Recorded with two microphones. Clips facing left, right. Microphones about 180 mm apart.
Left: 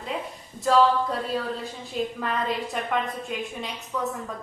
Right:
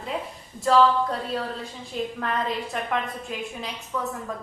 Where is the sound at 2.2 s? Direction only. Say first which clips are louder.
Even; centre (ahead or behind).